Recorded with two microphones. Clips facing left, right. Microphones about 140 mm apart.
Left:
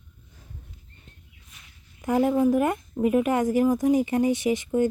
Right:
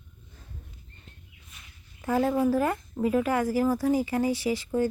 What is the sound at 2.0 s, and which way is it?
A woman's voice, 15° left (ahead or behind).